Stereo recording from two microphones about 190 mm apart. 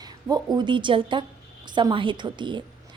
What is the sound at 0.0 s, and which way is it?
A woman's voice, 20° right (ahead or behind).